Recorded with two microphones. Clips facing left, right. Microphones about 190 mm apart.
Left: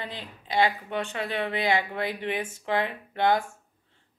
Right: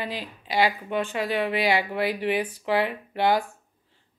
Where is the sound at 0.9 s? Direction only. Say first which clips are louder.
Right 4 dB; 10° right (ahead or behind).